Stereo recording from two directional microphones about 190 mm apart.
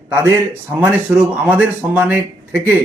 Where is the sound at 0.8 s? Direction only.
5° right (ahead or behind).